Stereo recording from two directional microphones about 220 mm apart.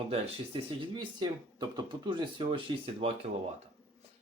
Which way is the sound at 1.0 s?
20° right (ahead or behind).